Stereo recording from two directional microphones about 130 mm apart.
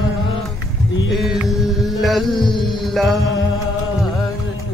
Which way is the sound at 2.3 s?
35° left (ahead or behind).